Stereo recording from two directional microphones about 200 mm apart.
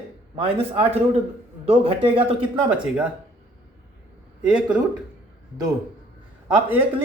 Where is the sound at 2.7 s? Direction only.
10° right (ahead or behind).